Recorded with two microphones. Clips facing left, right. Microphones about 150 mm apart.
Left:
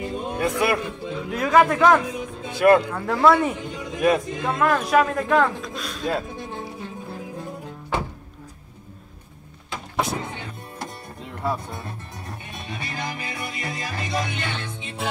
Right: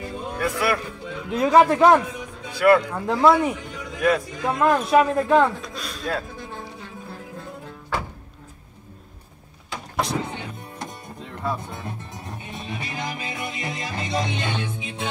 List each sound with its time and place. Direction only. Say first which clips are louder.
0.0 s music: left 2 dB; 20° left (ahead or behind)
0.6 s a man's voice: left 2 dB; 20° left (ahead or behind)
1.3 s a man's voice: right 2 dB; 25° right (ahead or behind)
2.4 s music: left 1 dB; 20° left (ahead or behind)
2.9 s speech: right 1 dB; 20° right (ahead or behind)
3.5 s a man's voice: left 3 dB; 20° left (ahead or behind)
4.5 s a man's voice: right 2 dB; 20° right (ahead or behind)
5.6 s a sound: left 2 dB; centre (ahead or behind)
6.0 s music: left 2 dB; 20° left (ahead or behind)
9.7 s vehicle: even; centre (ahead or behind)
11.7 s music: right 1 dB; 20° right (ahead or behind)